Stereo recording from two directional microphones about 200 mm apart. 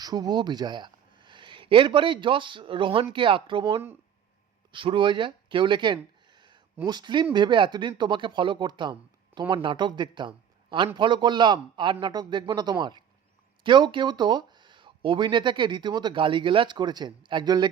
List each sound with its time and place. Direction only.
0.0 s a man's voice: 20° right (ahead or behind)